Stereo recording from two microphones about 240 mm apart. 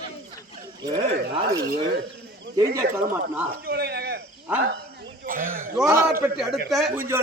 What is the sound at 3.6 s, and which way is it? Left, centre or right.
Speech, right.